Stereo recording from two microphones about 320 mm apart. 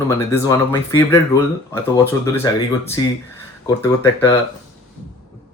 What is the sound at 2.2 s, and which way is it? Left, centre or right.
Speech, centre.